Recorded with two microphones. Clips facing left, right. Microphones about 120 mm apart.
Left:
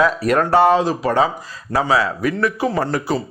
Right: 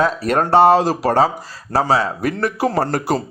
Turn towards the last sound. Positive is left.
turn(degrees=-40)  # may be behind; listen again after turning